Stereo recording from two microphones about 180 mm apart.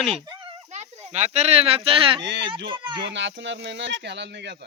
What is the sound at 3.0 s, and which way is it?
Speech, 85° right.